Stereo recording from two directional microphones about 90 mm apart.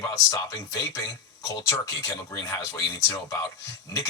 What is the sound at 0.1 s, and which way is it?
Speech, 40° left (ahead or behind).